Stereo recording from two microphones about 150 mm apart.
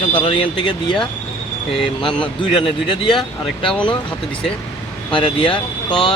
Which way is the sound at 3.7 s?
5° left (ahead or behind).